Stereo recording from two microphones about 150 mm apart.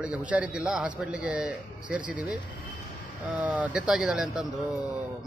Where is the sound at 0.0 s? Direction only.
10° right (ahead or behind).